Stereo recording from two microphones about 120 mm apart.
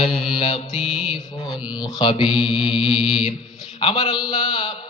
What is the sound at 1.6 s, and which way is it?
Speech, 35° left (ahead or behind).